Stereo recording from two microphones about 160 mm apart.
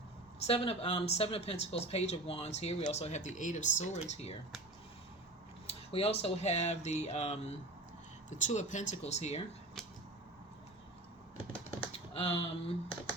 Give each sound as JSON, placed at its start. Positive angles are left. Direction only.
{"t": 0.4, "sound": "speech", "side_deg": 40}
{"t": 5.6, "sound": "speech", "side_deg": 40}
{"t": 9.8, "sound": "a sound", "side_deg": 0}
{"t": 12.1, "sound": "speech", "side_deg": 35}